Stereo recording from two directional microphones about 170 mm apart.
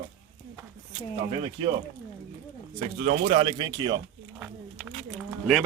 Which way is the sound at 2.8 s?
40° right (ahead or behind).